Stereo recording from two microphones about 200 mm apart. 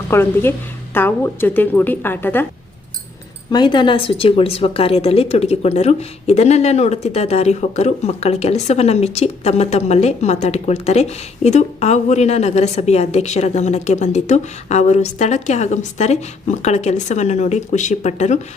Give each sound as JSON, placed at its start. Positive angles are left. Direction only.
{"t": 0.1, "sound": "a woman's voice", "side_deg": 10}
{"t": 3.5, "sound": "a woman's voice", "side_deg": 20}